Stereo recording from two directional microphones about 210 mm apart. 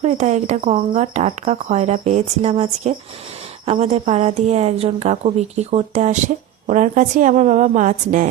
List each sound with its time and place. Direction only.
0.0 s a woman's voice: 35° right (ahead or behind)